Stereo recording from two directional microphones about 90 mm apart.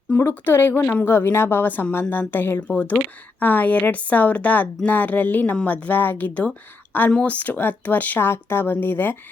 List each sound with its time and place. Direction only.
0.1 s a woman's voice: 20° left (ahead or behind)